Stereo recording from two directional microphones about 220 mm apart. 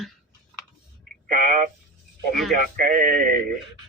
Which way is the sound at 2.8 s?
40° right (ahead or behind).